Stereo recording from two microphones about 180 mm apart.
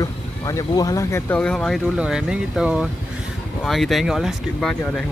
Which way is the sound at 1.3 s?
5° left (ahead or behind).